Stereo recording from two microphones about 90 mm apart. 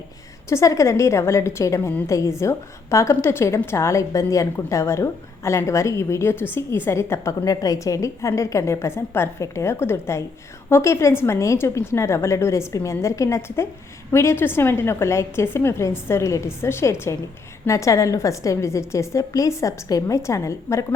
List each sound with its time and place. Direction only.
0.4 s a woman's voice: 35° left (ahead or behind)